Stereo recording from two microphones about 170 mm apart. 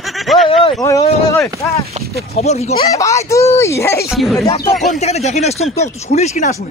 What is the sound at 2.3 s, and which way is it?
Speech, 40° left (ahead or behind).